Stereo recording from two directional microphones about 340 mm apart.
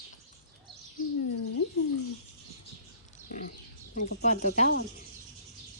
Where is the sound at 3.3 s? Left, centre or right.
Left.